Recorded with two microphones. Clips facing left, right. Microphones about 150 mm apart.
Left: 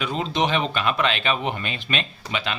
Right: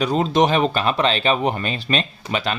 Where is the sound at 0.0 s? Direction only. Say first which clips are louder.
Right 6 dB; 40° right (ahead or behind).